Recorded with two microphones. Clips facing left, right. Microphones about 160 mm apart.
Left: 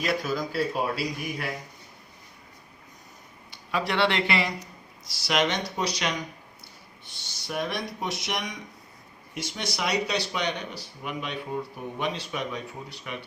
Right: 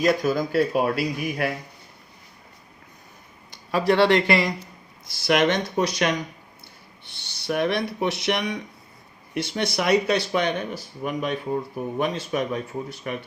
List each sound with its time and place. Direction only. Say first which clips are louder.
0.0 s speech: right 7 dB; 45° right (ahead or behind)
3.5 s speech: right 7 dB; 40° right (ahead or behind)
5.0 s speech: right 6 dB; 55° right (ahead or behind)
7.1 s speech: right 7 dB; 60° right (ahead or behind)